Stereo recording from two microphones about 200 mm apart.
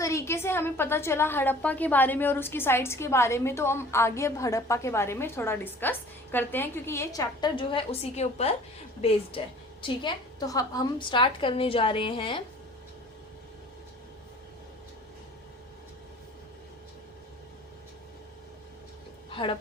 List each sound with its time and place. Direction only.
0.0 s a woman's voice: 15° left (ahead or behind)
19.3 s dog: 25° left (ahead or behind)